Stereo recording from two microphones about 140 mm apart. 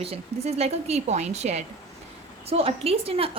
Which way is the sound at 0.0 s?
45° right (ahead or behind).